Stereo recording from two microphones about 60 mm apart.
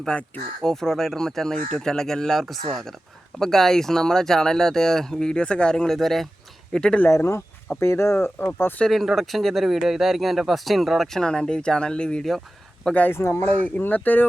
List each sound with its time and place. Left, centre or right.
0.0 s speech: centre
7.8 s speech: left
8.9 s speech: centre
11.2 s speech: centre
13.1 s speech: left
13.4 s speech: left